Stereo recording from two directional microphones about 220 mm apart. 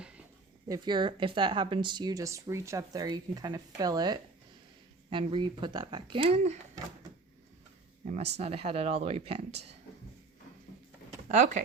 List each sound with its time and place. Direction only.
0.7 s a woman's voice: 20° right (ahead or behind)
8.0 s speech: 30° right (ahead or behind)
11.3 s speech: 35° right (ahead or behind)